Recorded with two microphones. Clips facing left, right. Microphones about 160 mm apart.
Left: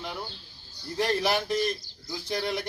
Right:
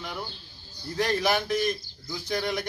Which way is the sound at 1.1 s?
30° left (ahead or behind).